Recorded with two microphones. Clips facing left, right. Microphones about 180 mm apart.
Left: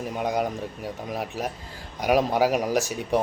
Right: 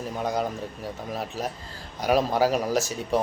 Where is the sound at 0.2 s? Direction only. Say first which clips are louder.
Left 1 dB; 15° left (ahead or behind).